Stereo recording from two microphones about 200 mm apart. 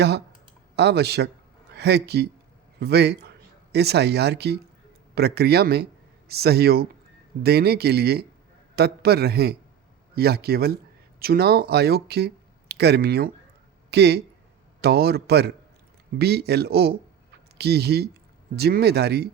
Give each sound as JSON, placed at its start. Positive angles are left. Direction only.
{"t": 0.8, "sound": "a man's voice", "side_deg": -55}